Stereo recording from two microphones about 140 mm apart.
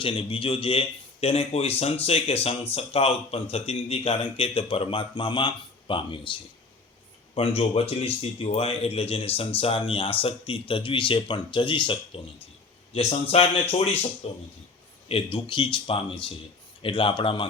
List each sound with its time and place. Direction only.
0.0 s speech: 40° left (ahead or behind)
7.3 s speech: 40° left (ahead or behind)